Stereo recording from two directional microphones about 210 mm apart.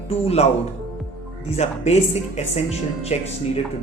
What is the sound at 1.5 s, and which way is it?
A man's voice, 30° left (ahead or behind).